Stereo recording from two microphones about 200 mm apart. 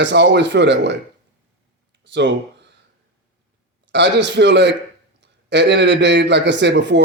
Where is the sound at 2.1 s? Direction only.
60° right (ahead or behind).